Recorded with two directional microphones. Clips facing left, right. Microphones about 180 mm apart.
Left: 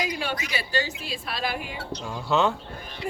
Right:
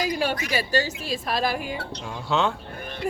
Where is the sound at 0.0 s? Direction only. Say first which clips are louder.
Right 4 dB; 40° right (ahead or behind).